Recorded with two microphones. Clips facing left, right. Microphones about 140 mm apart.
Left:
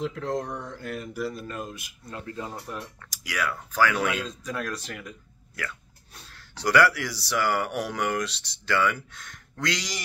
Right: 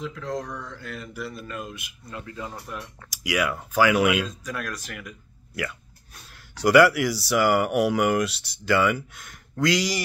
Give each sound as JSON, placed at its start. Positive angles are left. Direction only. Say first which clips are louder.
{"t": 0.0, "sound": "mantra", "louder": "left 2 dB", "side_deg": 60}
{"t": 0.7, "sound": "speech", "louder": "left 3 dB", "side_deg": 45}
{"t": 3.0, "sound": "speech", "louder": "right 7 dB", "side_deg": -15}
{"t": 4.3, "sound": "speech", "louder": "left 1 dB", "side_deg": 25}
{"t": 6.3, "sound": "speech", "louder": "right 5 dB", "side_deg": -10}